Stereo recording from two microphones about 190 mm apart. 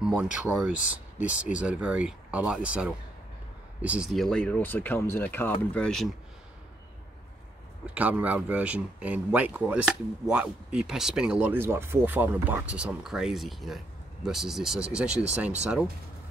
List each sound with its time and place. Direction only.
0.0 s speech: 5° right (ahead or behind)
7.8 s speech: 10° right (ahead or behind)